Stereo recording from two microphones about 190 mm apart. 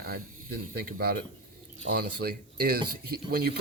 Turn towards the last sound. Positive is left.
turn(degrees=-55)  # may be behind; listen again after turning